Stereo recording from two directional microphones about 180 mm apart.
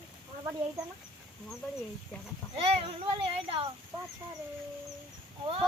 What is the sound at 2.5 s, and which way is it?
A child's voice, 30° right (ahead or behind).